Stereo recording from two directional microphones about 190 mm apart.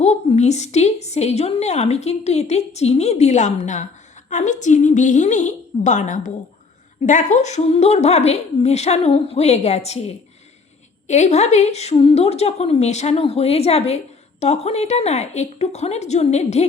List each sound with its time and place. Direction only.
0.0 s a woman's voice: 35° left (ahead or behind)
11.1 s a woman's voice: 35° left (ahead or behind)